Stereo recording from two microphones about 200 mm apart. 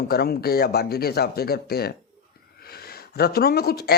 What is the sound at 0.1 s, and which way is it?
Speech, 50° left (ahead or behind).